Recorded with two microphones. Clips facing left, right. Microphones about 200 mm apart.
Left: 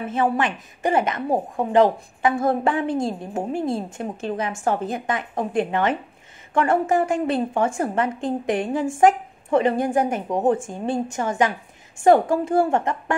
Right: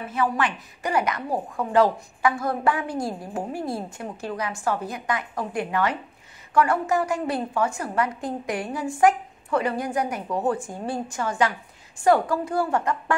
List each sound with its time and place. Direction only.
0.0 s a woman's voice: 25° left (ahead or behind)